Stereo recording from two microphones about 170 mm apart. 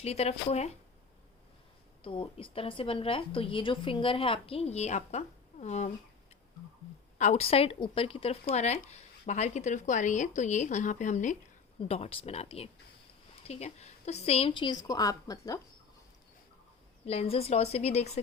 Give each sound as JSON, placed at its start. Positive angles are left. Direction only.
{"t": 0.0, "sound": "a woman's voice", "side_deg": 35}
{"t": 2.0, "sound": "a woman's voice", "side_deg": 30}
{"t": 7.2, "sound": "a woman's voice", "side_deg": 40}
{"t": 17.1, "sound": "a woman's voice", "side_deg": 35}